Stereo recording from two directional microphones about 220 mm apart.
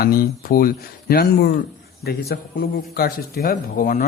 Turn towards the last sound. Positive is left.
turn(degrees=40)  # may be behind; listen again after turning